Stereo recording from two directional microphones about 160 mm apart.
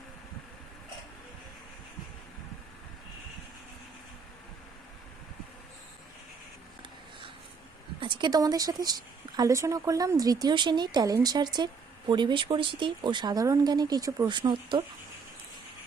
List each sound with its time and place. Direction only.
8.0 s speech: 30° right (ahead or behind)